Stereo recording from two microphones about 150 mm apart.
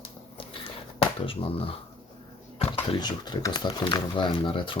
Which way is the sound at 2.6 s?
35° left (ahead or behind).